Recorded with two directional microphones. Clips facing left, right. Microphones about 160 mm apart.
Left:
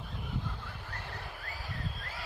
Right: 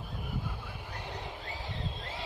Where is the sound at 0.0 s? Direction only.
5° right (ahead or behind).